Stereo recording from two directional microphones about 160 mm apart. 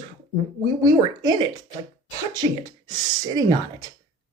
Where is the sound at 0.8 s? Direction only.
25° right (ahead or behind).